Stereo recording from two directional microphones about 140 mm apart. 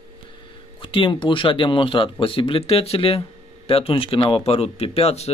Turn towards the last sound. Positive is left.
turn(degrees=50)  # may be behind; listen again after turning